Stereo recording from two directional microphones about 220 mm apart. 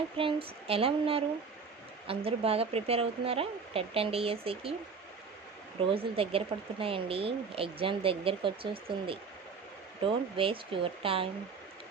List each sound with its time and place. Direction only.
0.2 s speech: 25° right (ahead or behind)
5.9 s speech: 25° right (ahead or behind)